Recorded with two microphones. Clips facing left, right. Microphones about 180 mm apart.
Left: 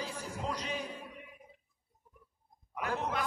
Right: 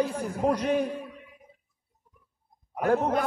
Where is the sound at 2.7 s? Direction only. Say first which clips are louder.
Right 11 dB; 50° right (ahead or behind).